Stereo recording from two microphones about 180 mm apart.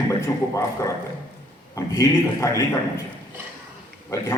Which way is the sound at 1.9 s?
15° left (ahead or behind).